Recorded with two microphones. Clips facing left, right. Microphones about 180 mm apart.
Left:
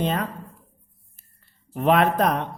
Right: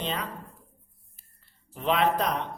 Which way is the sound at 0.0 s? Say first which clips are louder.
Left 7 dB; 50° left (ahead or behind).